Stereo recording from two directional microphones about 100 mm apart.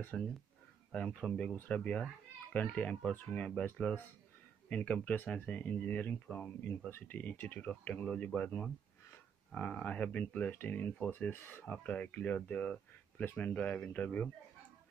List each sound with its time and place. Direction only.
0.1 s speech: 10° left (ahead or behind)